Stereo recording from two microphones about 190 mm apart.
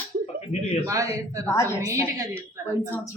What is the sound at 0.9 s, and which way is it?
Speech, 15° right (ahead or behind).